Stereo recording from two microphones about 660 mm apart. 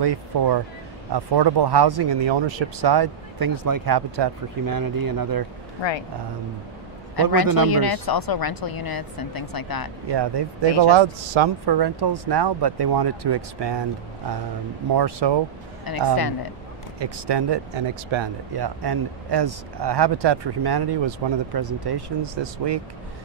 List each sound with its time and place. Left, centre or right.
0.0 s a man's voice: right
5.8 s speech: left
7.2 s a woman's voice: left
10.0 s a man's voice: right
15.0 s a man's voice: right
15.9 s a woman's voice: left
17.0 s a man's voice: right